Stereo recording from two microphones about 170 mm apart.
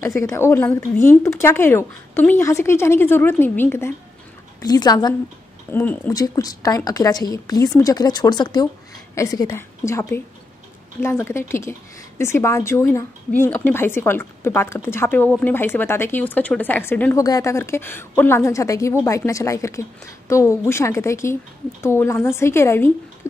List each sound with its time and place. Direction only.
0.0 s speech: 15° left (ahead or behind)
5.7 s speech: 10° left (ahead or behind)